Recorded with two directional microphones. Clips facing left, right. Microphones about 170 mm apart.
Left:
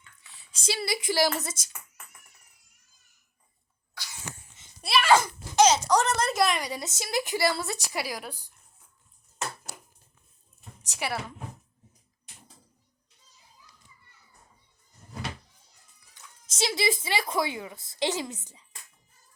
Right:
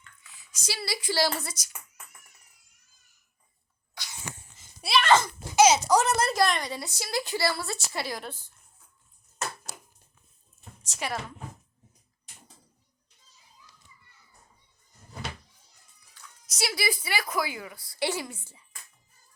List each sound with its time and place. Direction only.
0.2 s speech: 35° left (ahead or behind)
4.5 s a sound: centre (ahead or behind)
5.5 s a woman's voice: 10° right (ahead or behind)
6.3 s speech: 5° left (ahead or behind)
10.8 s speech: 15° left (ahead or behind)
16.1 s speech: 25° left (ahead or behind)